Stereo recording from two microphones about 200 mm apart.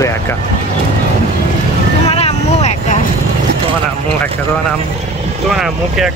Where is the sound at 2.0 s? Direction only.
30° left (ahead or behind).